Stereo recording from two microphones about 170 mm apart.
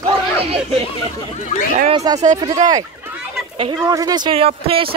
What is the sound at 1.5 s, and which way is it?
Speech, 40° left (ahead or behind).